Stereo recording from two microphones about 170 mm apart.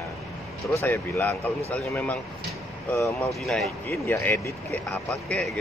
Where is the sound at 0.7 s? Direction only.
15° left (ahead or behind).